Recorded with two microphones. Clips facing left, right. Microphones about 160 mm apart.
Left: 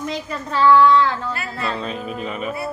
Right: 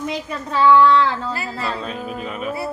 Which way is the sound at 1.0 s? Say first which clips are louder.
Even; 30° right (ahead or behind).